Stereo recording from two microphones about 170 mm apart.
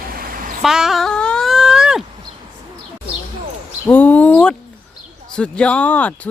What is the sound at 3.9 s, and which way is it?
Speech, 10° left (ahead or behind).